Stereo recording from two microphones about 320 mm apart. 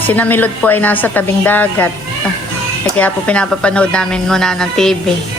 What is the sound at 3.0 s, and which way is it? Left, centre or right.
Speech, centre.